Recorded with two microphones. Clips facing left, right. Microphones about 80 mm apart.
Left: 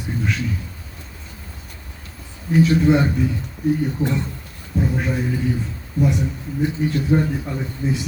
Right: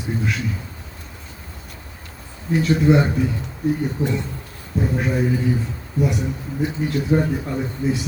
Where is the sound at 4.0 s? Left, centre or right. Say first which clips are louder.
Left 1 dB; right.